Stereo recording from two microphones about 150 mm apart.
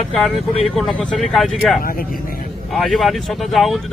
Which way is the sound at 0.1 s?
Centre (ahead or behind).